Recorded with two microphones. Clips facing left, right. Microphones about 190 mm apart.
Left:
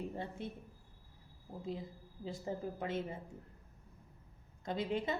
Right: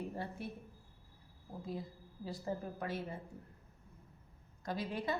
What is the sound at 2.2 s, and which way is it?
Speech, 25° left (ahead or behind).